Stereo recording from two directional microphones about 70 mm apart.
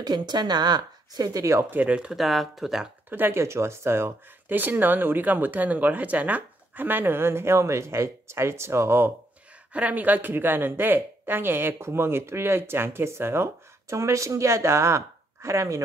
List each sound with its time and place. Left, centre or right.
0.0 s a woman's voice: right
1.4 s speech: right
1.7 s speech: right; by 2.9 s centre
3.1 s speech: right
9.7 s speech: right